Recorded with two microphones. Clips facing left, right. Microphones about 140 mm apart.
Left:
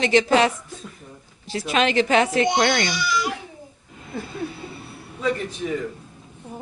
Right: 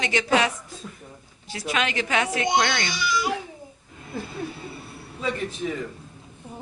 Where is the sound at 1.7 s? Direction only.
30° left (ahead or behind).